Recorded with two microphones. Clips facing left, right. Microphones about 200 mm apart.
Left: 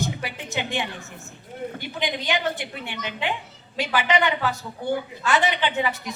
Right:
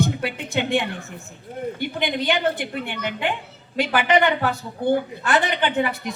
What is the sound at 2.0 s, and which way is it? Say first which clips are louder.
A woman's voice: right 3 dB; 55° right (ahead or behind).